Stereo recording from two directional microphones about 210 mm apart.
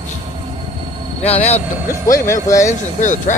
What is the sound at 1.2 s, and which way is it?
Speech, 30° left (ahead or behind).